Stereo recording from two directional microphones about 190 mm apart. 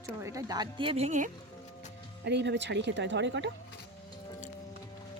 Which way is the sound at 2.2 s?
65° right (ahead or behind).